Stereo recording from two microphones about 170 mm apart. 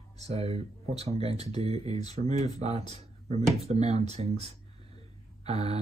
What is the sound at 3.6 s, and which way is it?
Speech, 40° right (ahead or behind).